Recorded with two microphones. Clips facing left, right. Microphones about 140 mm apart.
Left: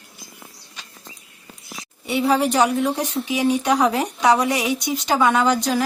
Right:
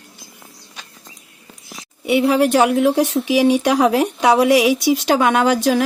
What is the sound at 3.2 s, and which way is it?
Speech, 85° right.